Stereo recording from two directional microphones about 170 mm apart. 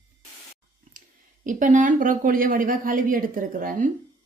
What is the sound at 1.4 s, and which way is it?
Speech, 50° right (ahead or behind).